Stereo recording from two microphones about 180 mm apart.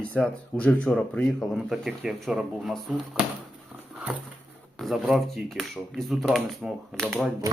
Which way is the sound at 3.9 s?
5° right (ahead or behind).